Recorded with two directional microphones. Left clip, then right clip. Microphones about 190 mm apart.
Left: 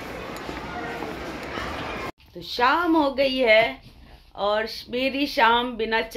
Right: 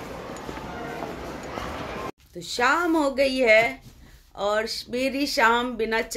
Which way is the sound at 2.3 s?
15° right (ahead or behind).